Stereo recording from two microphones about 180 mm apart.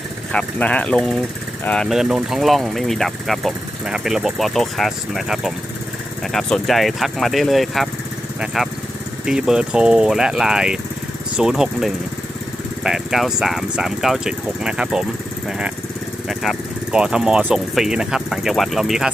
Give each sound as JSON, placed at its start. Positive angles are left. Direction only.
{"t": 0.3, "sound": "speech", "side_deg": 5}